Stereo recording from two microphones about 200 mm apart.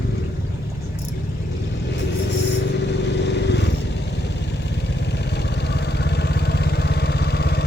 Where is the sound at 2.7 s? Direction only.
60° left (ahead or behind).